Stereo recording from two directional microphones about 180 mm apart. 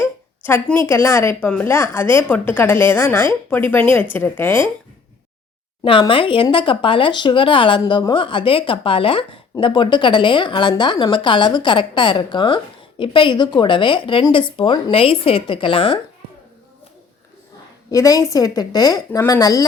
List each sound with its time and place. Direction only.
0.0 s a sound: 15° left (ahead or behind)
0.9 s a woman's voice: 15° left (ahead or behind)
5.8 s speech: 30° left (ahead or behind)
17.9 s speech: 20° left (ahead or behind)